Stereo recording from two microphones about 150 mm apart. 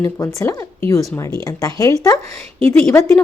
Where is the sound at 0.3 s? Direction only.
20° left (ahead or behind).